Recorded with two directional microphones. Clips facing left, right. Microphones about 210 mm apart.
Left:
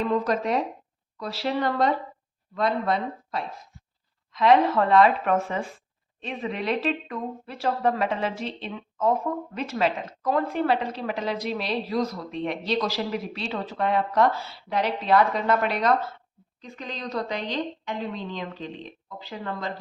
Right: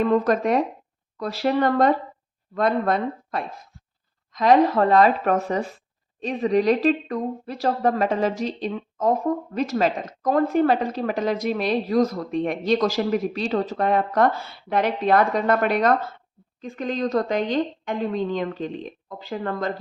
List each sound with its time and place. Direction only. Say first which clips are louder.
0.0 s speech: right 5 dB; 55° right (ahead or behind)